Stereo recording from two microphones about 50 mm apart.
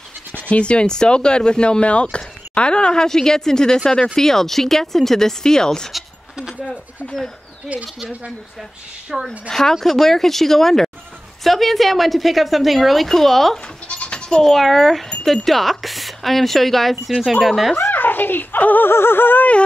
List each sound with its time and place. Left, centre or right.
0.3 s speech: left
7.6 s speech: right
9.1 s a woman's voice: centre
9.5 s a woman's voice: centre
13.8 s goat: left
14.3 s a woman's voice: centre
17.9 s speech: left
18.9 s a sound: left